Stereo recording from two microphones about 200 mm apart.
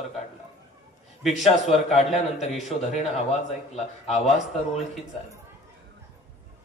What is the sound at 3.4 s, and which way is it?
Speech, 35° left (ahead or behind).